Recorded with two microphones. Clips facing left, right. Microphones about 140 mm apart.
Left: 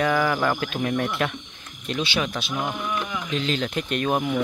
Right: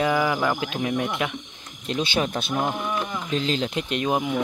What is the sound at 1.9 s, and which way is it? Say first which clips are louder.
Speech: right 2 dB; 30° right (ahead or behind).